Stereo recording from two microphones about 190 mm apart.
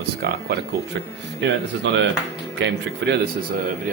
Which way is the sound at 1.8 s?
70° right (ahead or behind).